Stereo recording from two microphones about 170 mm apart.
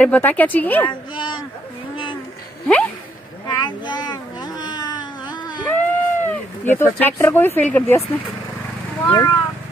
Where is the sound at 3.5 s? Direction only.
25° left (ahead or behind).